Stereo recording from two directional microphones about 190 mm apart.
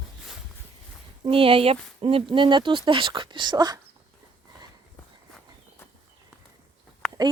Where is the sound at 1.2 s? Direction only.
30° right (ahead or behind).